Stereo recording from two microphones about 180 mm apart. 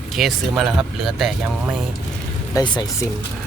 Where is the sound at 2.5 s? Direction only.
25° left (ahead or behind).